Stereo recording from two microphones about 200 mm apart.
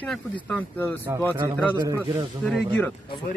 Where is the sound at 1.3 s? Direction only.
15° right (ahead or behind).